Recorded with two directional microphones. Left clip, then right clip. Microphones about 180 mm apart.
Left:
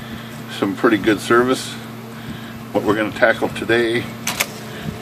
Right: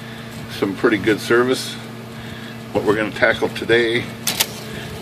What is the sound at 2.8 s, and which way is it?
Speech, 10° left (ahead or behind).